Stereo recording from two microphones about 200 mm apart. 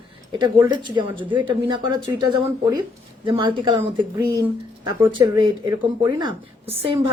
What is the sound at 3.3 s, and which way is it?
Speech, 25° right (ahead or behind).